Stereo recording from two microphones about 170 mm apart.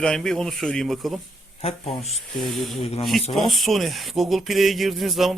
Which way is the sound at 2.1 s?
Centre (ahead or behind).